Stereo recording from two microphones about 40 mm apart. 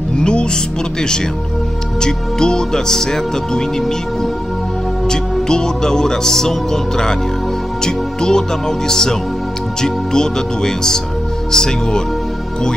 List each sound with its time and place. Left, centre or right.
0.2 s speech: left
2.0 s speech: centre